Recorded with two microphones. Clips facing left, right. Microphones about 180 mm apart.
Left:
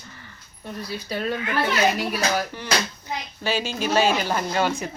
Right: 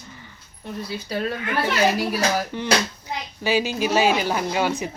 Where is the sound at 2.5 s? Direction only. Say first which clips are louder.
Right 4 dB; 20° right (ahead or behind).